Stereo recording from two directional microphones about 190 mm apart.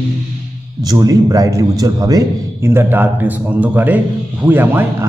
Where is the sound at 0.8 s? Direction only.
20° right (ahead or behind).